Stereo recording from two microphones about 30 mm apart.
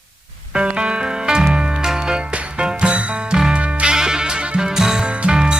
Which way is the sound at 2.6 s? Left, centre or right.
Right.